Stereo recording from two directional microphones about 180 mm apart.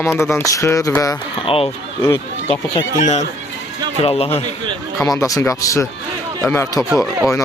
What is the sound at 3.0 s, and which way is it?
A man's voice, 40° left (ahead or behind).